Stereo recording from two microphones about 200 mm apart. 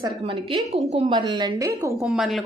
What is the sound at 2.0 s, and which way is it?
Speech, centre (ahead or behind).